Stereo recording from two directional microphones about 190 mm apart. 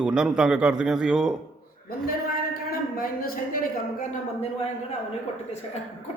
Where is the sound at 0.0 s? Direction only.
5° right (ahead or behind).